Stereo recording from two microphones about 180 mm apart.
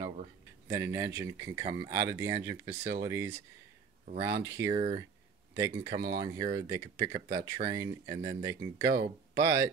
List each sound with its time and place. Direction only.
0.7 s speech: 15° right (ahead or behind)
4.4 s speech: 15° right (ahead or behind)
4.7 s speech: 30° right (ahead or behind)